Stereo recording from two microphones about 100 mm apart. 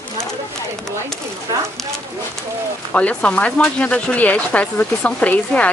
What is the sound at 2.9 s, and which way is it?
Speech, 10° left (ahead or behind).